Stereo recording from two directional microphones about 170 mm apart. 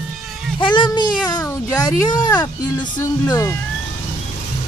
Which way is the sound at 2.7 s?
15° left (ahead or behind).